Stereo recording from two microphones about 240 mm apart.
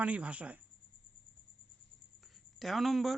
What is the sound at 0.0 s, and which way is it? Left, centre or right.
Speech, centre.